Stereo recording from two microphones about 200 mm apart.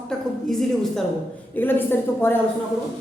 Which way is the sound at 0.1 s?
Centre (ahead or behind).